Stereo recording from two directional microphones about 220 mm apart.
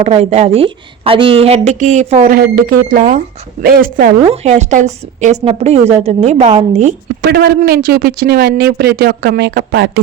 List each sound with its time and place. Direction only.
0.0 s a woman's voice: 30° right (ahead or behind)
7.2 s speech: 45° right (ahead or behind)